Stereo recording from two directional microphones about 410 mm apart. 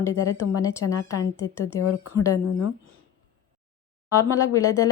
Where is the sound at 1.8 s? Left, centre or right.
Left.